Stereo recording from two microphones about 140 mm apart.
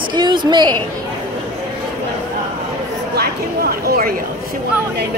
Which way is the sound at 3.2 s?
90° right.